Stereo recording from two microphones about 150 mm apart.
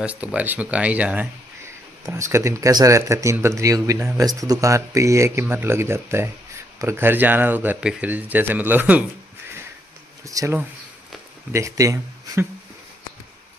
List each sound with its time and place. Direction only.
0.0 s speech: 10° right (ahead or behind)
2.0 s speech: 20° right (ahead or behind)
10.2 s speech: 20° right (ahead or behind)